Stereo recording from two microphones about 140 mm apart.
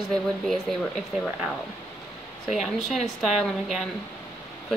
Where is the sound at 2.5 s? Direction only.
Centre (ahead or behind).